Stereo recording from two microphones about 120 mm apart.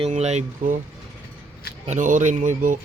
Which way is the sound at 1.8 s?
85° right.